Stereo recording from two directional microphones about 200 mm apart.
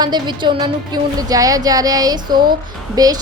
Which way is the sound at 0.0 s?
20° right (ahead or behind).